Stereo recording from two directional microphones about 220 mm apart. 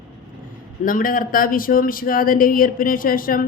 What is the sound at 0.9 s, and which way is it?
Speech, 40° left (ahead or behind).